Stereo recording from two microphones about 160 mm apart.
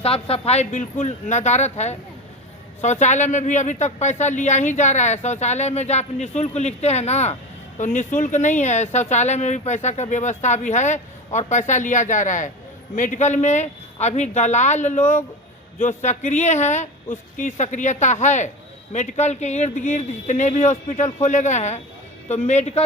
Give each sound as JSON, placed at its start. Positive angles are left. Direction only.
{"t": 0.0, "sound": "speech", "side_deg": 35}